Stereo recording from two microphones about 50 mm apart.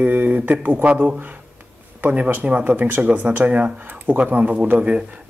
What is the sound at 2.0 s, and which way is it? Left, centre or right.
Speech, right.